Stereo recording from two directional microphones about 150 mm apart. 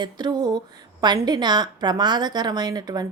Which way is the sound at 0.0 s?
25° right (ahead or behind).